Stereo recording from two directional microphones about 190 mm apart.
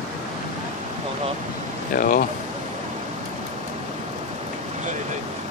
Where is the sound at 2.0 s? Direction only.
50° left (ahead or behind).